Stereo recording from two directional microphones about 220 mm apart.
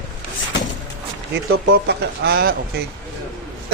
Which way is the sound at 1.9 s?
45° right (ahead or behind).